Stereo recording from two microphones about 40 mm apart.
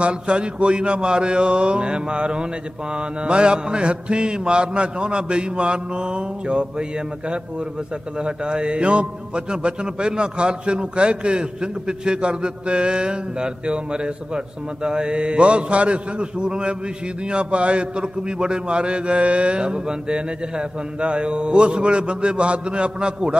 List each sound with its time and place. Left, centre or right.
0.0 s a man's voice: right